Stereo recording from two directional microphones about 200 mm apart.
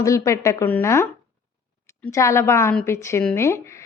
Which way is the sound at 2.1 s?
15° left (ahead or behind).